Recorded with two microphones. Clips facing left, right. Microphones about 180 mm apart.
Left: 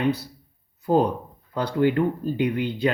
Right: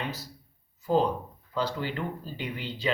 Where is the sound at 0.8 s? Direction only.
55° left (ahead or behind).